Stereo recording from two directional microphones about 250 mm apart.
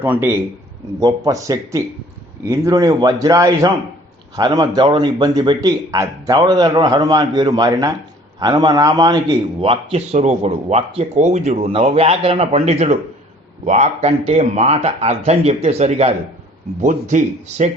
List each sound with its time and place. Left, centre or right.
0.0 s a man's voice: centre; by 17.7 s right